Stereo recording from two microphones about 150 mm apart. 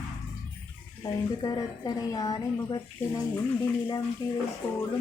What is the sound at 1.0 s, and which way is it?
A woman's voice, 25° left (ahead or behind).